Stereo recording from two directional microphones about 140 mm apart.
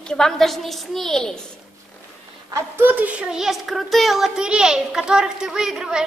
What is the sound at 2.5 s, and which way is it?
A woman's voice, 15° right (ahead or behind).